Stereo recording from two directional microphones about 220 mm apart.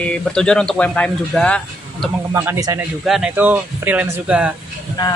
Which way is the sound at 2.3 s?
10° right (ahead or behind).